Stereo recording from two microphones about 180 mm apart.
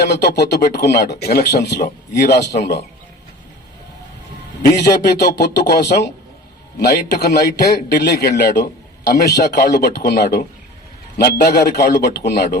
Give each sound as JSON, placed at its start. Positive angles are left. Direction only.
{"t": 0.0, "sound": "a man's voice", "side_deg": 65}
{"t": 4.6, "sound": "a man's voice", "side_deg": 65}